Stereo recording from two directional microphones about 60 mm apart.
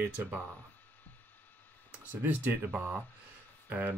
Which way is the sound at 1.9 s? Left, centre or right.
Right.